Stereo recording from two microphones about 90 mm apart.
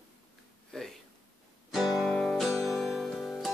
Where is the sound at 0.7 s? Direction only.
5° left (ahead or behind).